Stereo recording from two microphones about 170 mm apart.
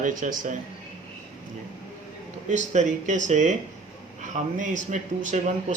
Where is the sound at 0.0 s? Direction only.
50° right (ahead or behind).